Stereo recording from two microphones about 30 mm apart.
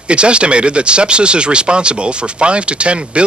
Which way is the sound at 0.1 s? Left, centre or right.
Right.